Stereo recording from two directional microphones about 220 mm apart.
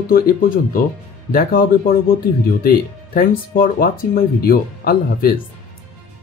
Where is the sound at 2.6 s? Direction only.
40° left (ahead or behind).